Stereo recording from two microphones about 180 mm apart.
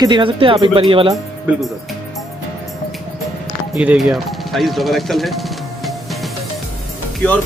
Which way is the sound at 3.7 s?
5° right (ahead or behind).